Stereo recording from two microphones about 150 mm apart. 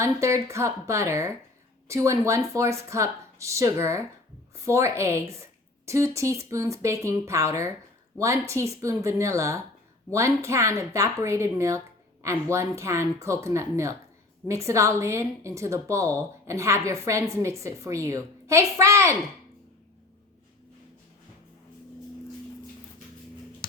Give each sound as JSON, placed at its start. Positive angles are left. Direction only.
{"t": 0.0, "sound": "a woman's voice", "side_deg": -20}